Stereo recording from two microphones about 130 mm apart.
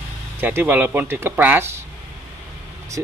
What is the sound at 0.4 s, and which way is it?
Speech, 15° right (ahead or behind).